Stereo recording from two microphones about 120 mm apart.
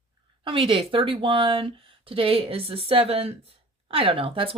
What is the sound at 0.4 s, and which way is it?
Speech, 45° right (ahead or behind).